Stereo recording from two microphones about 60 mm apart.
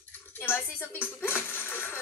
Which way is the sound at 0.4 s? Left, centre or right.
Left.